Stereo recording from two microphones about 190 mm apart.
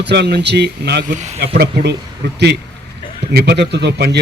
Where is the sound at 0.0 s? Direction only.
60° right (ahead or behind).